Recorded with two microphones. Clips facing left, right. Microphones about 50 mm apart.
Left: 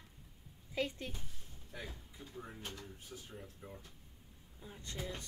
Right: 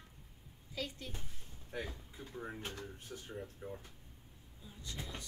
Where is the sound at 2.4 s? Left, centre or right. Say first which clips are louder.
Right 5 dB; right.